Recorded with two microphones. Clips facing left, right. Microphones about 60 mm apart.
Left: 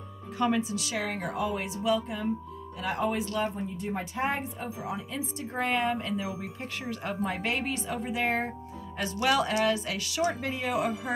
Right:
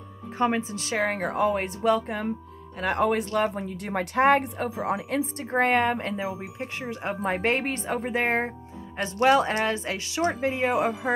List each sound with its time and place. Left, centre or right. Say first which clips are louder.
0.4 s a woman's voice: right 2 dB; right
3.3 s speech: right 5 dB; right
4.6 s a woman's voice: right 7 dB; right
6.4 s speech: right 3 dB; right